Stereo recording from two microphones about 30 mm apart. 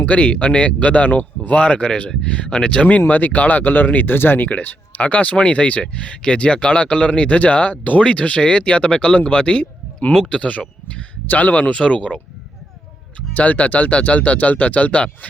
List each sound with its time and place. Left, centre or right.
0.2 s speech: left
1.6 s speech: left
2.8 s speech: left
4.9 s speech: left
11.3 s speech: left
11.7 s speech: left
13.3 s speech: left